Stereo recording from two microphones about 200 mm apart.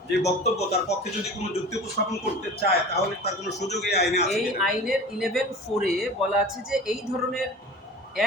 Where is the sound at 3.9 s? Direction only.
55° left (ahead or behind).